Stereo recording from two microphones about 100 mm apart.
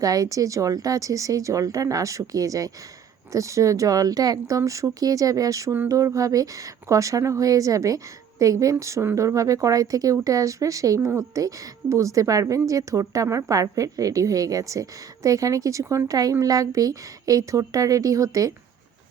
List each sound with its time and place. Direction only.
0.0 s a woman's voice: 35° right (ahead or behind)